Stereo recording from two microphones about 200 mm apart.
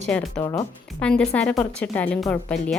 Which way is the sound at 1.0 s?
5° left (ahead or behind).